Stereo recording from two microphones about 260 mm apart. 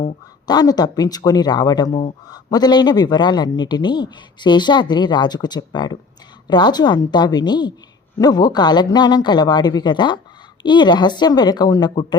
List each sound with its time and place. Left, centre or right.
0.4 s a man's voice: centre